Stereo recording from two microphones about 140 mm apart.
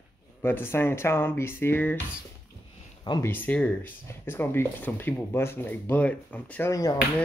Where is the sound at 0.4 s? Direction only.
15° left (ahead or behind).